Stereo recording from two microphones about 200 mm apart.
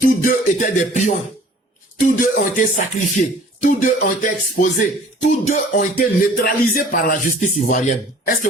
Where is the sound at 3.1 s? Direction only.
40° left (ahead or behind).